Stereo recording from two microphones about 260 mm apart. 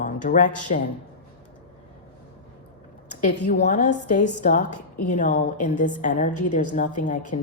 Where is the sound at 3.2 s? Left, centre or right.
Left.